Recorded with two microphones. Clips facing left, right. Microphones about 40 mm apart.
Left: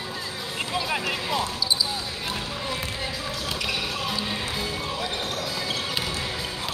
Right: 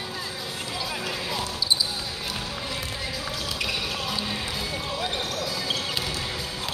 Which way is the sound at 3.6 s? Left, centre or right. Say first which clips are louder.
Left 1 dB; centre.